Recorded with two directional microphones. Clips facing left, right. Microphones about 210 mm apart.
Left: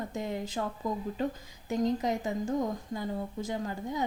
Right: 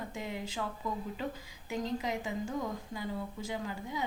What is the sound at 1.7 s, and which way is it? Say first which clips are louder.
Speech: left 6 dB; 45° left (ahead or behind).